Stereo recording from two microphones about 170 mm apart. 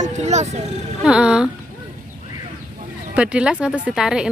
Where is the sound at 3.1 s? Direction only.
5° right (ahead or behind).